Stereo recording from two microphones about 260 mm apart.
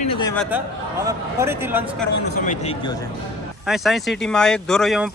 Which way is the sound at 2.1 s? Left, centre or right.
Left.